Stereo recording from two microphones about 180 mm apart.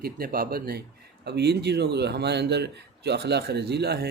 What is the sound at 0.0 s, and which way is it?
Speech, 55° right (ahead or behind).